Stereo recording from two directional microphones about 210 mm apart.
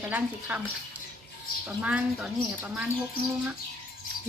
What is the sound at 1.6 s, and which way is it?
Speech, 5° right (ahead or behind).